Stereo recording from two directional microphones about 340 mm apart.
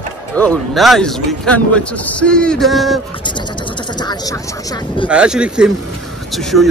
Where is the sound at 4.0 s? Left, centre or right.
Centre.